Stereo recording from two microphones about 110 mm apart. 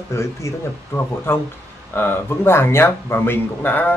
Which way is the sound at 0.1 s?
25° left (ahead or behind).